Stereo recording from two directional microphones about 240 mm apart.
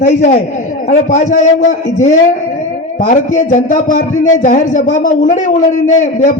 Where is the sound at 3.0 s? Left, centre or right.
Left.